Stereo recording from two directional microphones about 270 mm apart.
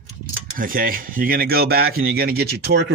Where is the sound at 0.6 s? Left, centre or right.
Right.